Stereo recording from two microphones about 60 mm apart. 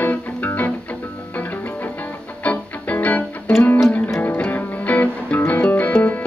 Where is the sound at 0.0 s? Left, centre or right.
Left.